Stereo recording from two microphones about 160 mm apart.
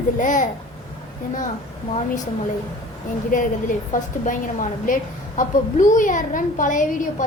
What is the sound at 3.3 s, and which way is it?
A woman's voice, 55° left (ahead or behind).